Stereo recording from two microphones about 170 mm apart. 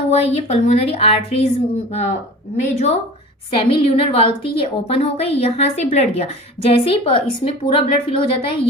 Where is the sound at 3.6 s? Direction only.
30° left (ahead or behind).